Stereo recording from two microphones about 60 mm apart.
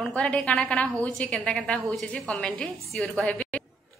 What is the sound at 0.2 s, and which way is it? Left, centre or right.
A woman's voice, centre.